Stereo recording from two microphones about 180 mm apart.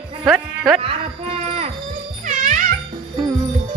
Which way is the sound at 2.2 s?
40° right (ahead or behind).